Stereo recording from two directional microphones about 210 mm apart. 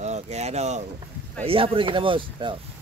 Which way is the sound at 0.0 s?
30° right (ahead or behind).